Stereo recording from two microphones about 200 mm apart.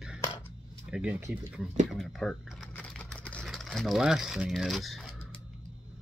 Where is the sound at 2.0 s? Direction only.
Centre (ahead or behind).